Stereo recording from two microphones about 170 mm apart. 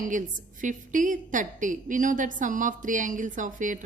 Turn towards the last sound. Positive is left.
turn(degrees=-50)  # may be behind; listen again after turning